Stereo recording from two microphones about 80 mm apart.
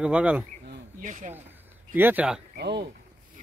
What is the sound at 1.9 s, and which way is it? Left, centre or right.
Speech, right.